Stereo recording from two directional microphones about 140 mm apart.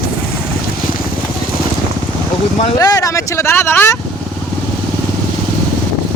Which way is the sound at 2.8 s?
25° left (ahead or behind).